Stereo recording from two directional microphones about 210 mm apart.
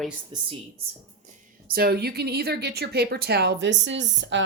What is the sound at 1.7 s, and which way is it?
A woman's voice, 45° right (ahead or behind).